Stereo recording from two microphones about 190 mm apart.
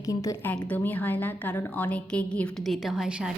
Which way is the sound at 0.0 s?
15° left (ahead or behind).